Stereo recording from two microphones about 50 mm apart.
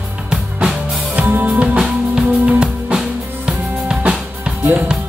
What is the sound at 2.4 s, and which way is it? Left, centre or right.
Music, centre.